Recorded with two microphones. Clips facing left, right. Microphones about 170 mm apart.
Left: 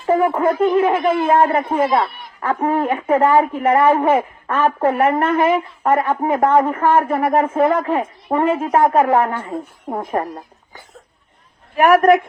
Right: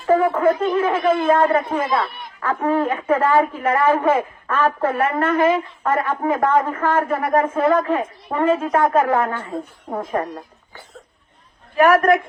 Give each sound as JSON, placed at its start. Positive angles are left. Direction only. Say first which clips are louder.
{"t": 0.0, "sound": "a man's voice", "louder": "even", "side_deg": 20}
{"t": 11.8, "sound": "a man's voice", "louder": "left 2 dB", "side_deg": 20}